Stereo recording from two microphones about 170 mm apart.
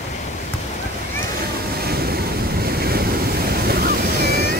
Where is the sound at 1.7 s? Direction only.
65° right (ahead or behind).